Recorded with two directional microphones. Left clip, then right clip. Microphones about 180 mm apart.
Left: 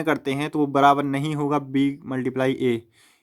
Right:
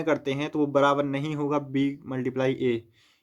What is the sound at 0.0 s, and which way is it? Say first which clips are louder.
Speech: left 2 dB; 30° left (ahead or behind).